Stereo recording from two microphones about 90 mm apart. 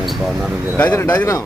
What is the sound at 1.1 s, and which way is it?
Speech, 35° left (ahead or behind).